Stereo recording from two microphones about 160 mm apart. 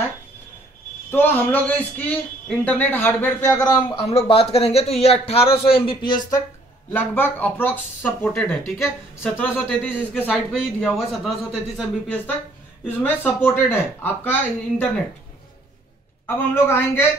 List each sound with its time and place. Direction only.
1.1 s a man's voice: 10° left (ahead or behind)
3.9 s speech: 40° left (ahead or behind)
6.9 s a man's voice: 10° left (ahead or behind)
12.8 s a man's voice: 10° left (ahead or behind)
16.5 s a man's voice: 15° left (ahead or behind)